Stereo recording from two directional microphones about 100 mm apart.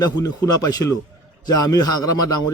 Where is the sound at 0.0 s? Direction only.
40° left (ahead or behind).